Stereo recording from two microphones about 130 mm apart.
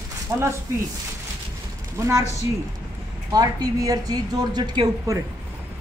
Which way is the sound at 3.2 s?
30° right (ahead or behind).